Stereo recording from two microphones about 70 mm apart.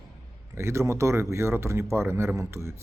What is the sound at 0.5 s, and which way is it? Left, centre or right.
A man's voice, right.